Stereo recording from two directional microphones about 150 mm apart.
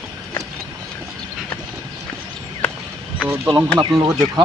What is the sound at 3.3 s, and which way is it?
Speech, 10° right (ahead or behind).